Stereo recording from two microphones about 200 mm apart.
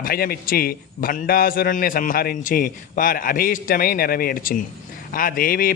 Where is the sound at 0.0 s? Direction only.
50° left (ahead or behind).